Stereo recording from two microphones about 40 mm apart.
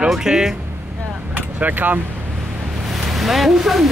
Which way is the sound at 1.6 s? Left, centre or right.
Right.